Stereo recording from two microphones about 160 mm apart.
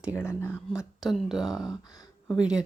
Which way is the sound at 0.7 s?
Centre (ahead or behind).